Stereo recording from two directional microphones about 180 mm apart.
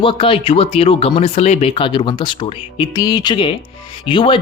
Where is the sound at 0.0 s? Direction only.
30° left (ahead or behind).